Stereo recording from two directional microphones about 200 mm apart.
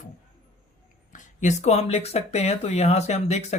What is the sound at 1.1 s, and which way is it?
Speech, 35° left (ahead or behind).